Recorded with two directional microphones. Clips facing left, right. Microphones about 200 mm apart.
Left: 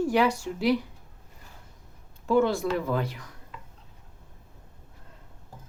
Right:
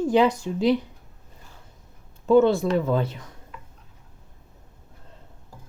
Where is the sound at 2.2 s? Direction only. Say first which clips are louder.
Right 6 dB; 25° right (ahead or behind).